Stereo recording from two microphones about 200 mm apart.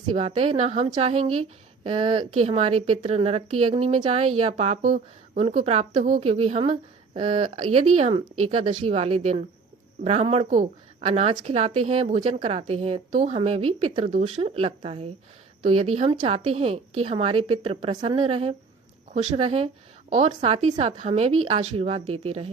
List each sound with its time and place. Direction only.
0.1 s a woman's voice: 30° right (ahead or behind)
5.4 s a woman's voice: 30° right (ahead or behind)
15.7 s a woman's voice: 90° right
16.0 s a woman's voice: 30° right (ahead or behind)